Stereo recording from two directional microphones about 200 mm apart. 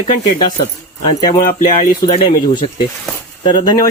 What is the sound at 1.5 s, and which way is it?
Speech, 40° left (ahead or behind).